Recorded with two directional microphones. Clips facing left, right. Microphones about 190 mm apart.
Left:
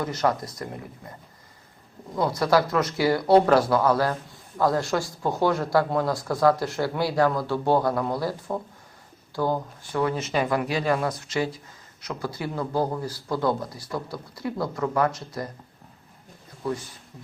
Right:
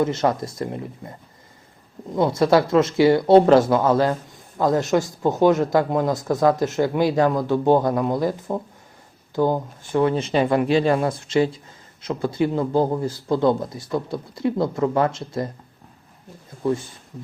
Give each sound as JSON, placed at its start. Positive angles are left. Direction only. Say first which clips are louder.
{"t": 0.0, "sound": "speech", "louder": "right 5 dB", "side_deg": -25}
{"t": 2.1, "sound": "speech", "louder": "right 4 dB", "side_deg": -25}